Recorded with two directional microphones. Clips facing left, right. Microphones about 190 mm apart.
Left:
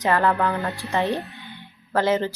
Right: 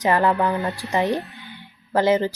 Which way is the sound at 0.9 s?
15° right (ahead or behind).